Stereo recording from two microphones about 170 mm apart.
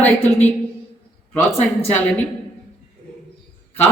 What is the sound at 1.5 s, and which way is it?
Speech, 10° left (ahead or behind).